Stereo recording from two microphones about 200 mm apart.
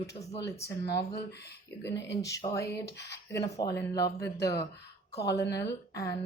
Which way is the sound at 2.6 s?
55° left (ahead or behind).